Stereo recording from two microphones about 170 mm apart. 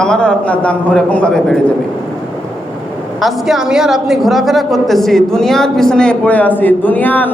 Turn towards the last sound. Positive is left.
turn(degrees=10)  # may be behind; listen again after turning